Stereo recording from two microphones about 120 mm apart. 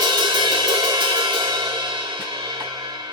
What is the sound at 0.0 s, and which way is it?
Music, 35° right (ahead or behind).